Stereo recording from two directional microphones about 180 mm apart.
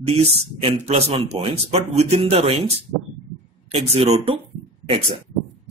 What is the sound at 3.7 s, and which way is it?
Speech, 35° right (ahead or behind).